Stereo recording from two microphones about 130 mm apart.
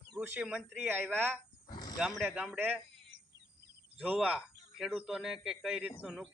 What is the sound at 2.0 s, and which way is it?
Speech, centre (ahead or behind).